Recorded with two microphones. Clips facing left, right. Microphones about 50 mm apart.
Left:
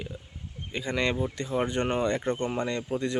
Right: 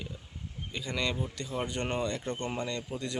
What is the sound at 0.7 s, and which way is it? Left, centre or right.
Speech, left.